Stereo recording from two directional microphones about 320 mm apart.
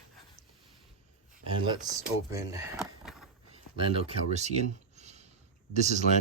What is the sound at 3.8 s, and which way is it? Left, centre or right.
Speech, centre.